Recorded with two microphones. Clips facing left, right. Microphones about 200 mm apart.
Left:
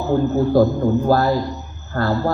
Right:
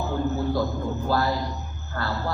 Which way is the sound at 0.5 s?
50° left (ahead or behind).